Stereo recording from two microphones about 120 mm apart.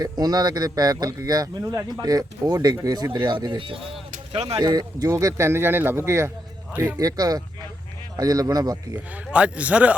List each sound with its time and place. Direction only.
0.0 s a man's voice: 35° right (ahead or behind)
4.3 s speech: 55° right (ahead or behind)
4.6 s a man's voice: 30° right (ahead or behind)
9.3 s speech: 10° right (ahead or behind)